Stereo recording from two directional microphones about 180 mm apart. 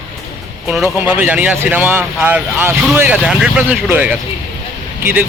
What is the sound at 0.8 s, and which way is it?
Speech, 10° right (ahead or behind).